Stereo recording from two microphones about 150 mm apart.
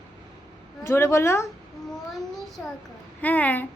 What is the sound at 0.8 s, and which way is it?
Speech, 20° left (ahead or behind).